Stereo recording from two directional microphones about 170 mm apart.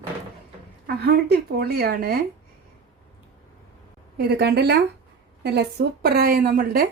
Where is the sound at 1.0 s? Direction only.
65° right (ahead or behind).